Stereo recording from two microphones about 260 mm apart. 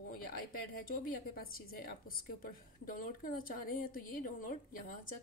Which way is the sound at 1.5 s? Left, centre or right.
Left.